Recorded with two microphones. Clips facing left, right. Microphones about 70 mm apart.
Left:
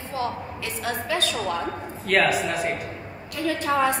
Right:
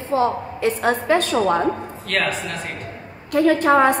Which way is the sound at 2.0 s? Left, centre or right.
Centre.